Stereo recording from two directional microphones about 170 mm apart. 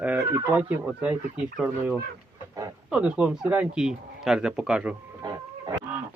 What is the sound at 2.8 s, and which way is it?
Speech, 5° right (ahead or behind).